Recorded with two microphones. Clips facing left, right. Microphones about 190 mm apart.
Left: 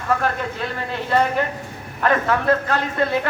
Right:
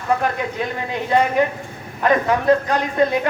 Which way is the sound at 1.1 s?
15° right (ahead or behind).